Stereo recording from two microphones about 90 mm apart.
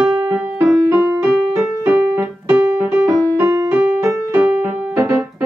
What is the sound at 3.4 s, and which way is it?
Music, 30° right (ahead or behind).